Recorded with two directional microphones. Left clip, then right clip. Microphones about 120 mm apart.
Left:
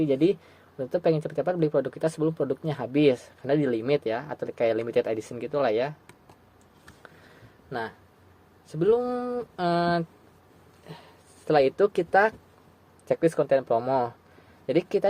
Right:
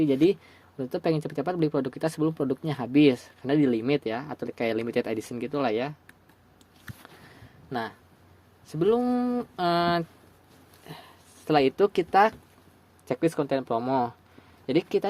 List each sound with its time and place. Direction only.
0.0 s speech: 40° right (ahead or behind)
7.7 s speech: 60° right (ahead or behind)
10.8 s speech: 75° right (ahead or behind); by 12.3 s 55° right (ahead or behind)
13.1 s speech: 40° right (ahead or behind)